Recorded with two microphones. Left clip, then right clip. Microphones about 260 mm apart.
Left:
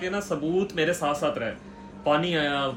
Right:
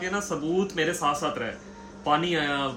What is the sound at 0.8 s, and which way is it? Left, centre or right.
Speech, centre.